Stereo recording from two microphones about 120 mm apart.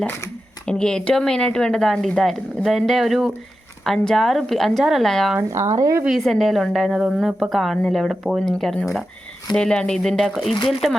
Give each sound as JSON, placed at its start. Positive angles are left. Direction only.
{"t": 0.6, "sound": "speech", "side_deg": 5}
{"t": 5.4, "sound": "speech", "side_deg": -25}
{"t": 6.1, "sound": "speech", "side_deg": 0}